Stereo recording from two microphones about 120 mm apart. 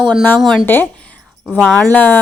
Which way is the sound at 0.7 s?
15° left (ahead or behind).